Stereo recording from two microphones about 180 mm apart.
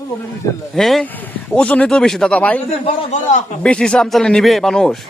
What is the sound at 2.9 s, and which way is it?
Speech, 40° left (ahead or behind).